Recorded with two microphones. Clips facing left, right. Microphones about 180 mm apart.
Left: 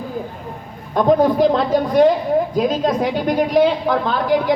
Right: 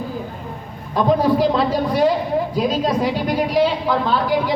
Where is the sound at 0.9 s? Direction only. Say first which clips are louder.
Left 2 dB; 50° left (ahead or behind).